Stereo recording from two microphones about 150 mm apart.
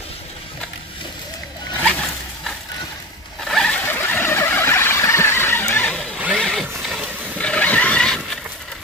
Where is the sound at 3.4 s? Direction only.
5° left (ahead or behind).